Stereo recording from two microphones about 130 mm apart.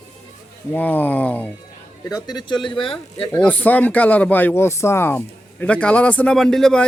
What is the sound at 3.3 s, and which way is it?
Speech, 10° left (ahead or behind).